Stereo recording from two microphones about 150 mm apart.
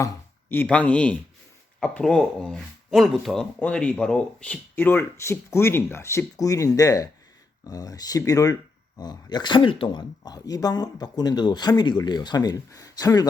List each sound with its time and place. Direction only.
0.0 s speech: 15° left (ahead or behind)